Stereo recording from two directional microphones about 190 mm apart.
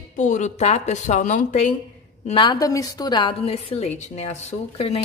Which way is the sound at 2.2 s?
25° left (ahead or behind).